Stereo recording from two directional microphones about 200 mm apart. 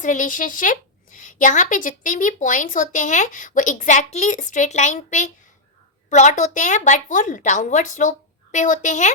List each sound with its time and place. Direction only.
0.0 s a woman's voice: 40° left (ahead or behind)